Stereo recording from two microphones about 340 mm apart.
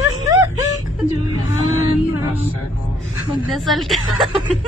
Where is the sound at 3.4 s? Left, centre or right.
Centre.